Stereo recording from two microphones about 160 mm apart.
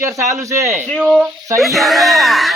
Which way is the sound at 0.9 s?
Centre (ahead or behind).